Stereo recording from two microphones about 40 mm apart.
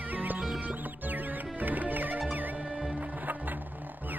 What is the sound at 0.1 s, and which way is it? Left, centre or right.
Music, right.